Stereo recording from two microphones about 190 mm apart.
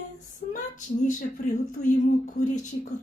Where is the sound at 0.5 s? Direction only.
45° left (ahead or behind).